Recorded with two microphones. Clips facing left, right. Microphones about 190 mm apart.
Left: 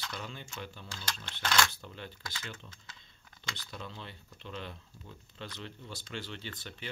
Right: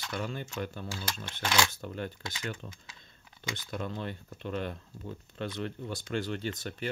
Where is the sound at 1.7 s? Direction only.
50° right (ahead or behind).